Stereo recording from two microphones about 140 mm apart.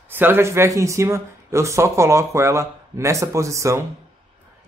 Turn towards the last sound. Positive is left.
turn(degrees=-20)  # may be behind; listen again after turning